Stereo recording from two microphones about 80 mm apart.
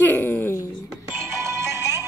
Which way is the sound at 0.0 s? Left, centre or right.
Left.